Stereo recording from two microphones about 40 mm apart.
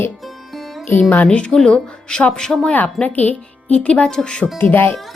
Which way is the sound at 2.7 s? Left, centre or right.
Left.